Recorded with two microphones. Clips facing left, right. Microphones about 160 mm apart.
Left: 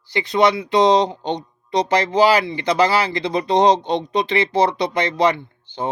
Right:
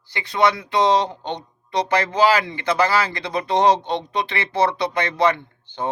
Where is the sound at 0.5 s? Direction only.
15° left (ahead or behind).